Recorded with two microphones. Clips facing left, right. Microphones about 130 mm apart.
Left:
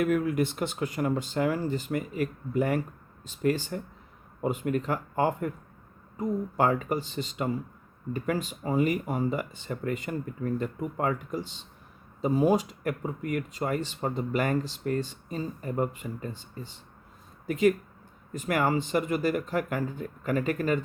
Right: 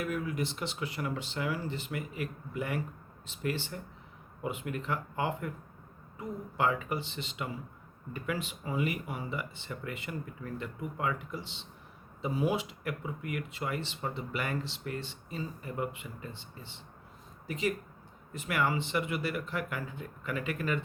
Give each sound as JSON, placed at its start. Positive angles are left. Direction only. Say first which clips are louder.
{"t": 0.0, "sound": "speech", "louder": "left 8 dB", "side_deg": 55}
{"t": 17.4, "sound": "speech", "louder": "left 9 dB", "side_deg": 55}